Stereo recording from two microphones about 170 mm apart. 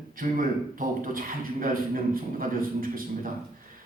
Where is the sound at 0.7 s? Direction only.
55° right (ahead or behind).